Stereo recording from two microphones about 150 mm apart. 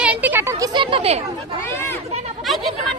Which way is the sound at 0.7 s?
35° right (ahead or behind).